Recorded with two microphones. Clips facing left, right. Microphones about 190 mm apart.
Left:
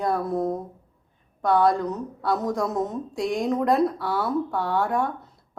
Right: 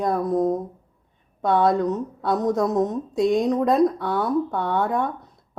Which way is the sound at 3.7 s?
20° right (ahead or behind).